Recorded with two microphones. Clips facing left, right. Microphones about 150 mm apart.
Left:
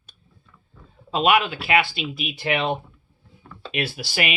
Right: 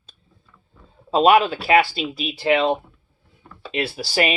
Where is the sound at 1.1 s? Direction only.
35° right (ahead or behind).